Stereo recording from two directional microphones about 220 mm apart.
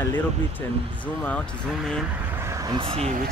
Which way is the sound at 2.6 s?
25° right (ahead or behind).